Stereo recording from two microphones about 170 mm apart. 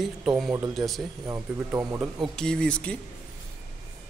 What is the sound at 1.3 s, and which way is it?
Speech, 20° right (ahead or behind).